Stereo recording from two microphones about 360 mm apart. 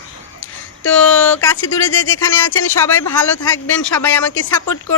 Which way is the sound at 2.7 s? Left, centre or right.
Centre.